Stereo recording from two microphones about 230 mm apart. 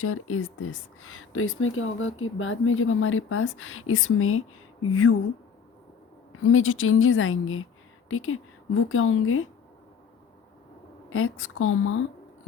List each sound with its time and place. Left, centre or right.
0.0 s speech: left
6.3 s speech: left
11.1 s speech: left